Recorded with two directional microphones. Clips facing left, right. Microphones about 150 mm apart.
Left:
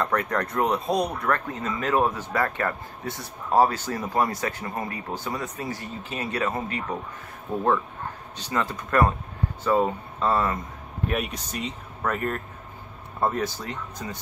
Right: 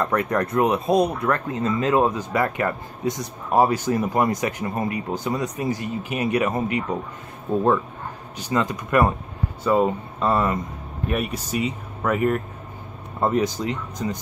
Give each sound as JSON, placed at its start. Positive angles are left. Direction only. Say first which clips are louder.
{"t": 0.0, "sound": "speech", "louder": "right 3 dB", "side_deg": -20}
{"t": 8.4, "sound": "speech", "louder": "right 5 dB", "side_deg": -15}
{"t": 11.1, "sound": "speech", "louder": "right 3 dB", "side_deg": -5}